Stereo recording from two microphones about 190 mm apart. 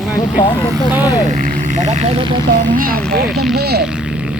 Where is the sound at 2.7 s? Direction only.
50° right (ahead or behind).